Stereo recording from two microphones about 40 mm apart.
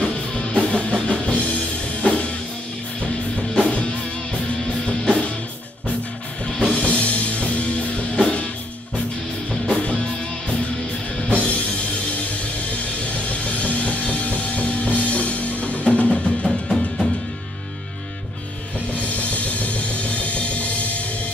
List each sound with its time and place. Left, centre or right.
0.0 s music: left
6.4 s music: left
9.7 s music: left
11.2 s music: left
13.3 s music: left
15.0 s drum kit: left
16.4 s music: centre
19.3 s music: left